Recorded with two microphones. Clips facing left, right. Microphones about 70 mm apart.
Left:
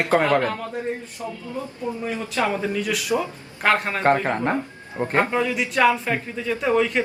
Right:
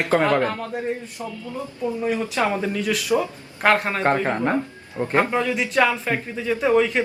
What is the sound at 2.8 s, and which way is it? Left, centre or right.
Speech, centre.